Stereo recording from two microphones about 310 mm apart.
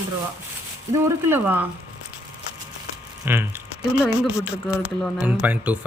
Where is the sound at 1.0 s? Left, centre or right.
Centre.